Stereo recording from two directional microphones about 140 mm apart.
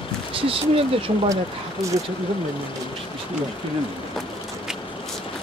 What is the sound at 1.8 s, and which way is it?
Speech, 20° right (ahead or behind).